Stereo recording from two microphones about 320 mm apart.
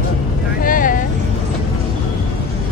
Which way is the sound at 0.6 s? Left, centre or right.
Left.